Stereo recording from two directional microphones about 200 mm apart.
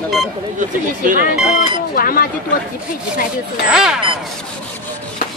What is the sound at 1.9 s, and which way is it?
Speech, 45° left (ahead or behind).